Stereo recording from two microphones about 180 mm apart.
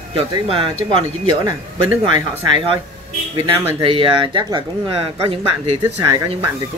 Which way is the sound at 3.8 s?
30° right (ahead or behind).